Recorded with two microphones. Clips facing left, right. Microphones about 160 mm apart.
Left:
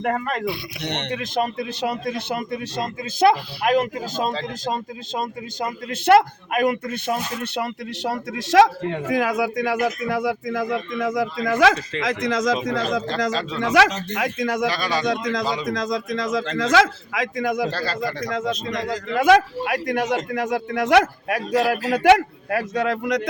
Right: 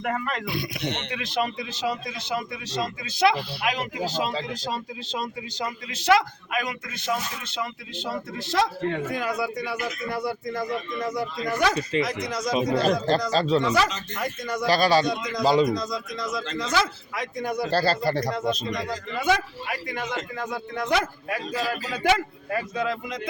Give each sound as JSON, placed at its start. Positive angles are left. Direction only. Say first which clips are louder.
{"t": 0.0, "sound": "speech", "louder": "left 4 dB", "side_deg": 45}
{"t": 0.8, "sound": "speech", "louder": "left 2 dB", "side_deg": 70}
{"t": 1.1, "sound": "a man's voice", "louder": "left 6 dB", "side_deg": 45}
{"t": 13.3, "sound": "speech", "louder": "right 5 dB", "side_deg": -35}
{"t": 13.7, "sound": "a man's voice", "louder": "left 6 dB", "side_deg": 80}
{"t": 14.7, "sound": "speech", "louder": "right 5 dB", "side_deg": -35}
{"t": 15.0, "sound": "a man's voice", "louder": "left 1 dB", "side_deg": 90}
{"t": 17.7, "sound": "speech", "louder": "right 3 dB", "side_deg": -35}
{"t": 18.3, "sound": "speech", "louder": "left 2 dB", "side_deg": 90}
{"t": 20.3, "sound": "speech", "louder": "left 7 dB", "side_deg": 90}